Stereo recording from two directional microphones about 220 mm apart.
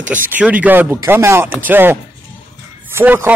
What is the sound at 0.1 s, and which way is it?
Speech, 5° right (ahead or behind).